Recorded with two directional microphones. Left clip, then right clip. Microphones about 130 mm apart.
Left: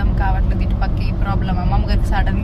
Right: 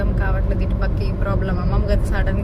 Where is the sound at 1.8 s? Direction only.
30° left (ahead or behind).